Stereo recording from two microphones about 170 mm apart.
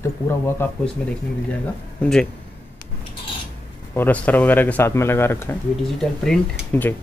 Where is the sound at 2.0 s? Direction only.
5° left (ahead or behind).